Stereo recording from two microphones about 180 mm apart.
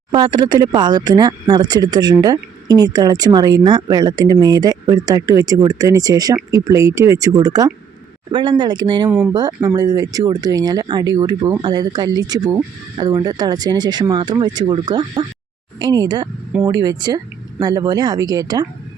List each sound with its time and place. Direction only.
0.1 s speech: 25° right (ahead or behind)
9.0 s speech: 5° right (ahead or behind)
9.3 s speech: 20° right (ahead or behind)